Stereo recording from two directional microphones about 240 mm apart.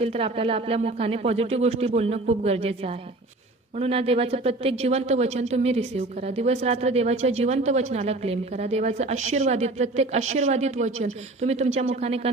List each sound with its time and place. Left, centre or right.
0.0 s a woman's voice: right